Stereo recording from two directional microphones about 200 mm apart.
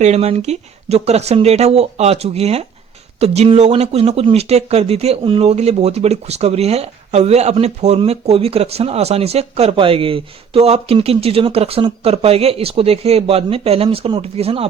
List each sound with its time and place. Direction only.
0.0 s speech: 30° right (ahead or behind)